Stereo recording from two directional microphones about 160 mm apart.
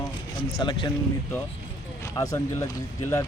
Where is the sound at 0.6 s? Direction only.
30° left (ahead or behind).